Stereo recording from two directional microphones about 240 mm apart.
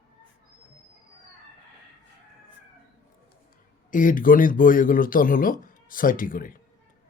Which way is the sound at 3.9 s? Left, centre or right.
Left.